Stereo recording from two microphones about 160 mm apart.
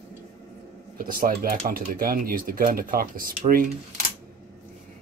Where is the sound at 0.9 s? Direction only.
60° right (ahead or behind).